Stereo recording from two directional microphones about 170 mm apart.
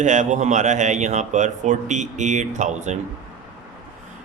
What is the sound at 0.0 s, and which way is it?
Speech, 45° right (ahead or behind).